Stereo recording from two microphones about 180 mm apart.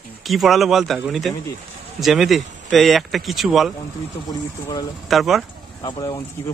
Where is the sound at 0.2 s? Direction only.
Centre (ahead or behind).